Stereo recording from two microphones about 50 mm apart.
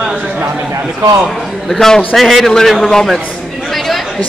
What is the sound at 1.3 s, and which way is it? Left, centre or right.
A man's voice, centre.